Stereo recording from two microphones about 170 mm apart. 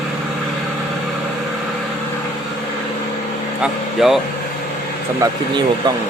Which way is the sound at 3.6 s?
Centre (ahead or behind).